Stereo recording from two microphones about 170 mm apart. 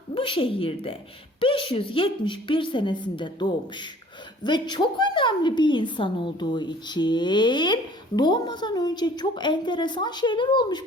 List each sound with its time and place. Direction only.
0.1 s a woman's voice: 30° left (ahead or behind)